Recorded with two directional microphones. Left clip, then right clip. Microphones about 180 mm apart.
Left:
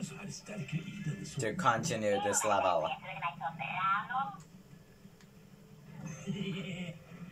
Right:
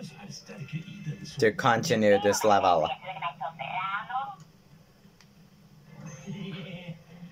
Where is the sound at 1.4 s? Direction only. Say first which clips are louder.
Right 7 dB; 50° right (ahead or behind).